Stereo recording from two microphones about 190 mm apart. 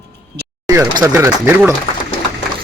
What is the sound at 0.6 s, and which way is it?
Speech, 15° right (ahead or behind).